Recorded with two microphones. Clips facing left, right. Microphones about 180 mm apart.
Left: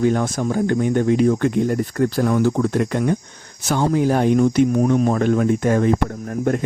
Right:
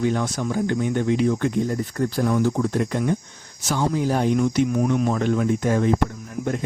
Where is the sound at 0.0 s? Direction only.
50° left (ahead or behind).